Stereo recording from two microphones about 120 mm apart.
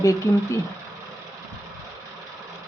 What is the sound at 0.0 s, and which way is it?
Speech, 25° left (ahead or behind).